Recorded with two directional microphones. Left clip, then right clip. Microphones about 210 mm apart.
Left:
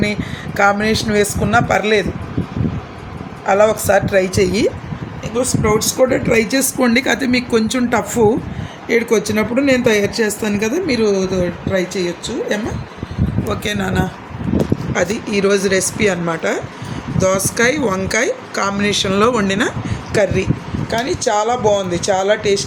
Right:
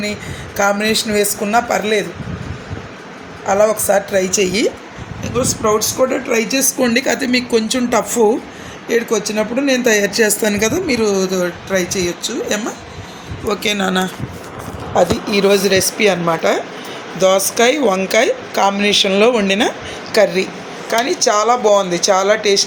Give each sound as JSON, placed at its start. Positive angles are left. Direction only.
{"t": 0.0, "sound": "speech", "side_deg": 15}
{"t": 3.5, "sound": "speech", "side_deg": 10}
{"t": 9.6, "sound": "speech", "side_deg": 10}
{"t": 20.1, "sound": "speech", "side_deg": 10}